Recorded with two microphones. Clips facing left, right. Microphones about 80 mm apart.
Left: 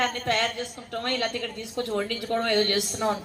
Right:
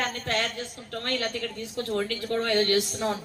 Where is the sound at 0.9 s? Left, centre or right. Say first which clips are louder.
Left 2 dB; left.